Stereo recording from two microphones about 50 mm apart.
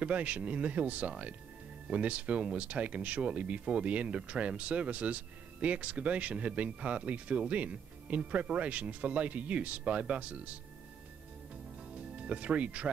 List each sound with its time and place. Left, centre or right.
0.0 s speech: right
11.9 s speech: right